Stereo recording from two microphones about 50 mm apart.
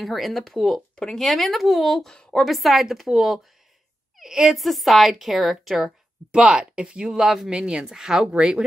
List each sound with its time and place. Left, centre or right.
0.0 s a woman's voice: centre
2.0 s speech: centre
2.4 s a woman's voice: centre
4.6 s a woman's voice: centre
6.3 s speech: centre